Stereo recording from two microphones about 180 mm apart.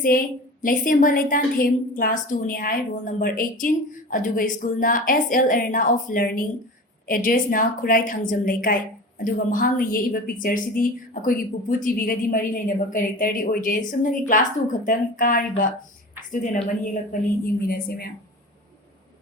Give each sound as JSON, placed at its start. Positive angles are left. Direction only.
{"t": 0.6, "sound": "a woman's voice", "side_deg": 50}